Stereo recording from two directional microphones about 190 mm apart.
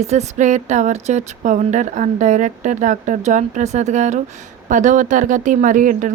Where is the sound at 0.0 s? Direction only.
35° right (ahead or behind).